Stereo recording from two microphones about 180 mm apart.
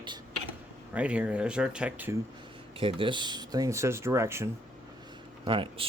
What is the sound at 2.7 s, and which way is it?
Speech, 30° right (ahead or behind).